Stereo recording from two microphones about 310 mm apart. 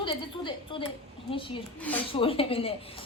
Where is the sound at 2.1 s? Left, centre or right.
Centre.